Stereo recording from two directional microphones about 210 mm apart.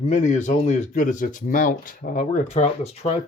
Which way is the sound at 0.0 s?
35° left (ahead or behind).